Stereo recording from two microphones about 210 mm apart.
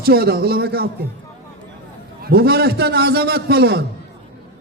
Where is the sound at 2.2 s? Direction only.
45° right (ahead or behind).